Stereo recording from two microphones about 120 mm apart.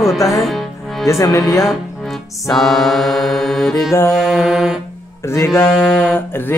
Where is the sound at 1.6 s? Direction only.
Centre (ahead or behind).